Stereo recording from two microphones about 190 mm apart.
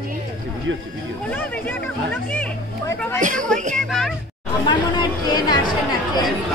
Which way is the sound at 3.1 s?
40° right (ahead or behind).